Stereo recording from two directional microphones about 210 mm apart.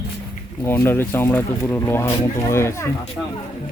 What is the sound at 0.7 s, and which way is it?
Speech, 10° left (ahead or behind).